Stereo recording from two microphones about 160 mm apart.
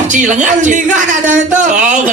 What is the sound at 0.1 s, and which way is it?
Speech, 50° right (ahead or behind).